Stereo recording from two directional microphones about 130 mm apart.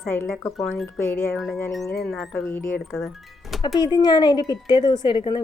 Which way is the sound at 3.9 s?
30° left (ahead or behind).